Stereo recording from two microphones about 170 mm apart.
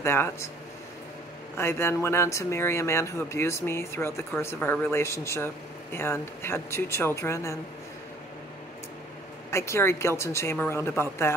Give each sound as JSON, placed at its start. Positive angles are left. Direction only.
{"t": 0.0, "sound": "speech", "side_deg": 15}
{"t": 1.6, "sound": "speech", "side_deg": 15}
{"t": 9.5, "sound": "speech", "side_deg": 15}